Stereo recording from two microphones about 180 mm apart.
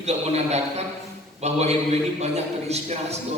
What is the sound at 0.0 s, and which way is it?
A man's voice, 35° right (ahead or behind).